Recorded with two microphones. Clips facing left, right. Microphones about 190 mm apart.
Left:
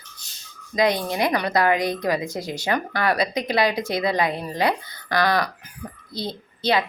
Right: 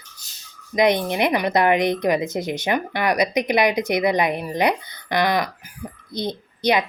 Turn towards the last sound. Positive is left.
turn(degrees=-15)  # may be behind; listen again after turning